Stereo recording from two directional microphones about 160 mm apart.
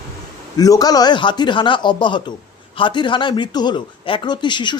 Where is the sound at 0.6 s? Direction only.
25° left (ahead or behind).